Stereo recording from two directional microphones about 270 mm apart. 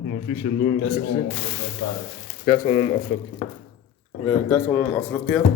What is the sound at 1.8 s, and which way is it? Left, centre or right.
Speech, left.